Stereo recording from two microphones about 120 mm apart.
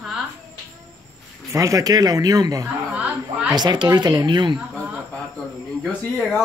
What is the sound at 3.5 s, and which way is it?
Speech, 35° right (ahead or behind).